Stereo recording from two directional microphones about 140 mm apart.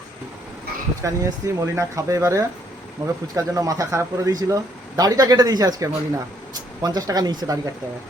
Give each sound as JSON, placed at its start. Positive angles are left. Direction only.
{"t": 1.0, "sound": "speech", "side_deg": -20}